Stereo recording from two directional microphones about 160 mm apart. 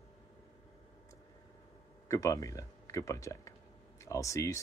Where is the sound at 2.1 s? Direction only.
20° left (ahead or behind).